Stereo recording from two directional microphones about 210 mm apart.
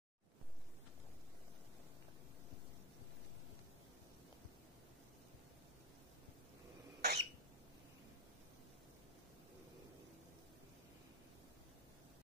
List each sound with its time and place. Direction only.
7.0 s cough: 50° right (ahead or behind)